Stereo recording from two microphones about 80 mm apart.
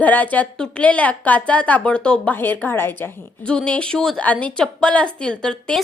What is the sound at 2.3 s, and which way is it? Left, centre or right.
Speech, left.